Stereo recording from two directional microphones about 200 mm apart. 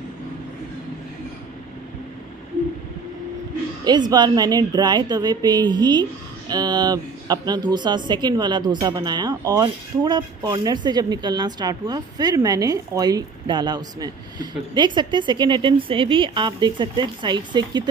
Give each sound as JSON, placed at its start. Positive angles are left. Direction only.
{"t": 3.8, "sound": "speech", "side_deg": -20}